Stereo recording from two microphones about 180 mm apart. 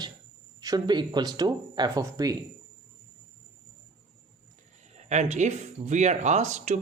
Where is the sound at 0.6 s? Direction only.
20° right (ahead or behind).